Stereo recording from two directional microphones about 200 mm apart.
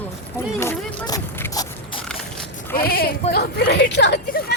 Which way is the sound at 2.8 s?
50° left (ahead or behind).